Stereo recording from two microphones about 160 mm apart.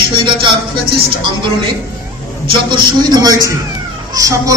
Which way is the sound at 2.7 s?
25° right (ahead or behind).